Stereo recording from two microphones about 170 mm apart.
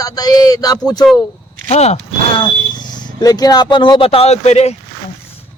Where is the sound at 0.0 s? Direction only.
25° left (ahead or behind).